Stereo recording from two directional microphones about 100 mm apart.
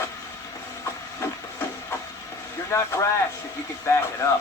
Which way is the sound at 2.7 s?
25° left (ahead or behind).